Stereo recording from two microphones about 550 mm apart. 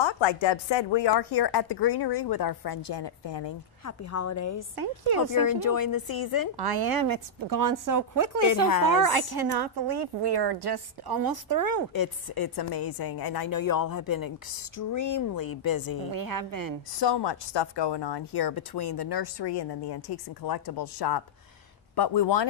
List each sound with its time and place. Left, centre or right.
0.0 s speech: left
3.8 s a woman's voice: left
4.7 s a woman's voice: right
5.3 s a woman's voice: left
6.6 s a woman's voice: right
8.5 s a woman's voice: left
8.9 s a woman's voice: right
11.9 s a woman's voice: left
16.1 s a woman's voice: right
17.0 s speech: left